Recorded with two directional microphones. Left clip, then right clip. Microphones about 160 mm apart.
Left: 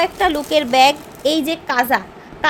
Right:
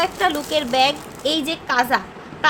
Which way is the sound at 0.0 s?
45° left (ahead or behind).